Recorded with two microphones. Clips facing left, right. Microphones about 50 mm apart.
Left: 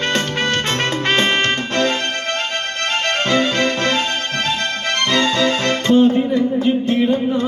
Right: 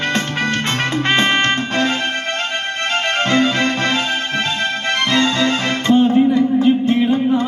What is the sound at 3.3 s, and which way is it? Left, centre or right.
Music, right.